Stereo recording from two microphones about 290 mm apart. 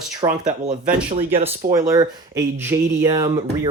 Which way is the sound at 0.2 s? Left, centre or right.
Centre.